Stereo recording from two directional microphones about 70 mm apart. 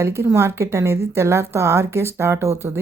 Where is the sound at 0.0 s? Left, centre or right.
Right.